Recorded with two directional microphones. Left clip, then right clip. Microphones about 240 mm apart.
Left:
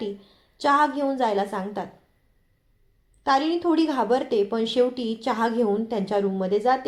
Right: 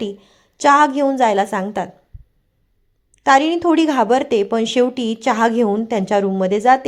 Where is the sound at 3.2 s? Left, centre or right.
Right.